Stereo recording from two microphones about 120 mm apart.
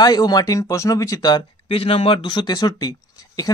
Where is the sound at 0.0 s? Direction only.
35° left (ahead or behind).